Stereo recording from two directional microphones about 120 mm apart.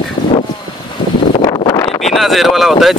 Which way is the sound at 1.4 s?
35° left (ahead or behind).